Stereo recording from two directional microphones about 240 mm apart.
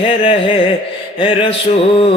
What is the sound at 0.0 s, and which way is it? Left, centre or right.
Mantra, centre.